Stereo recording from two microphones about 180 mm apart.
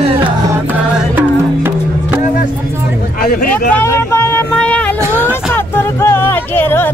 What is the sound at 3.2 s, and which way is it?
Vehicle, 55° left (ahead or behind).